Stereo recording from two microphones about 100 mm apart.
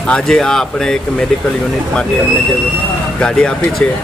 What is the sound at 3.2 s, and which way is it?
Speech, 10° left (ahead or behind).